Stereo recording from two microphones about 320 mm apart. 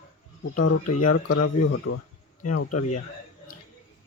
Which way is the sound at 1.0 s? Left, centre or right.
Left.